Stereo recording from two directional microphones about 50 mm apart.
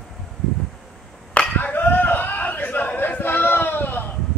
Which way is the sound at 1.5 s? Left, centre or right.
Left.